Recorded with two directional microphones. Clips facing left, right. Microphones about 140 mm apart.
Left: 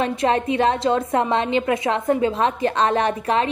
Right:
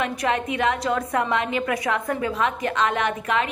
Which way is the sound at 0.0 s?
30° left (ahead or behind).